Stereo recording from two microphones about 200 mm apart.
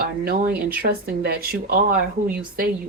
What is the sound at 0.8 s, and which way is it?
Speech, 50° right (ahead or behind).